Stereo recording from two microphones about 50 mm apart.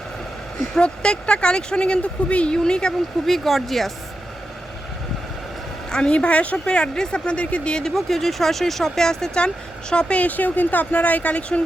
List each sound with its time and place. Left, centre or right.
0.8 s speech: centre
3.2 s speech: centre
5.9 s speech: centre
7.9 s speech: centre; by 11.6 s left